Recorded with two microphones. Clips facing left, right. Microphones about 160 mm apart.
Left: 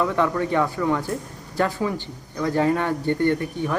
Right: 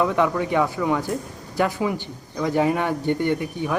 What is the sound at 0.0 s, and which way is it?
Speech, 15° right (ahead or behind).